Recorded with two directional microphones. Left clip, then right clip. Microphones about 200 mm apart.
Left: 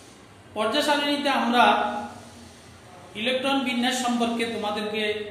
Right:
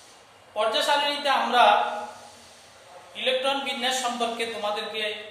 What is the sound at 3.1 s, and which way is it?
A man's voice, 15° right (ahead or behind).